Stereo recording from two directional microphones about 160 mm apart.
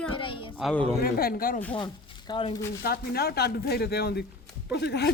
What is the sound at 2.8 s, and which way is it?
Speech, 75° left (ahead or behind).